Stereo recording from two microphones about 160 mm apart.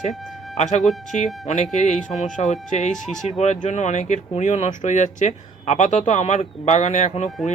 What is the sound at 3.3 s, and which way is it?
Speech, 45° left (ahead or behind).